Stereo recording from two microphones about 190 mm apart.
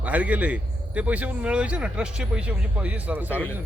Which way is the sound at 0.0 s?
5° right (ahead or behind).